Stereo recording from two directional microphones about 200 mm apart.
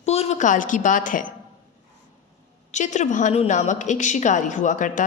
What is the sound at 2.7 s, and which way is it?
A woman's voice, 35° left (ahead or behind).